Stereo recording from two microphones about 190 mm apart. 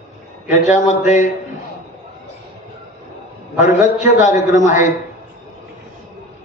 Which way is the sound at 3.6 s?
40° left (ahead or behind).